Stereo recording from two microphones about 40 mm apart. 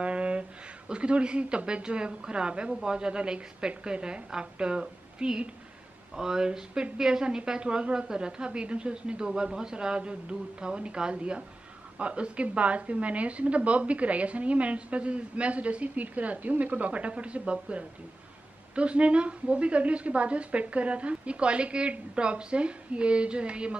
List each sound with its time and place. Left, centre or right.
0.0 s a woman's voice: right